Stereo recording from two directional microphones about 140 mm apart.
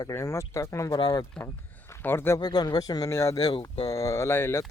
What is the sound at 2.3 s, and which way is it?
Speech, 30° left (ahead or behind).